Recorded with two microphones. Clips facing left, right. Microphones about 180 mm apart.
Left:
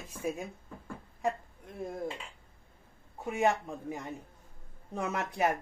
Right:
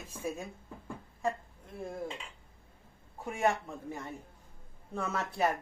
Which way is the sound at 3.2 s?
15° left (ahead or behind).